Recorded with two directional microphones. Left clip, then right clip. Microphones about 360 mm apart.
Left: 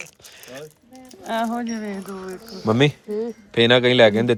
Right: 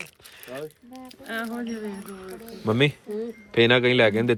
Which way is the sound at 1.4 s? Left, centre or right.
Left.